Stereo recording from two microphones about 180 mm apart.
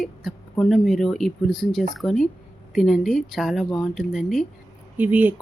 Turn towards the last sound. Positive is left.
turn(degrees=-10)  # may be behind; listen again after turning